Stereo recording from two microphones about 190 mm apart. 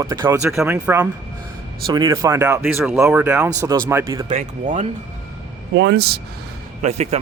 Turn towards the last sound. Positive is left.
turn(degrees=-35)  # may be behind; listen again after turning